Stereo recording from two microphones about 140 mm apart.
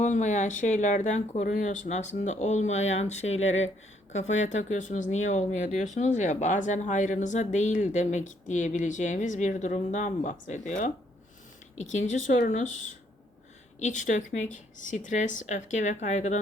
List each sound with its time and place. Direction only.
0.0 s speech: 60° left (ahead or behind)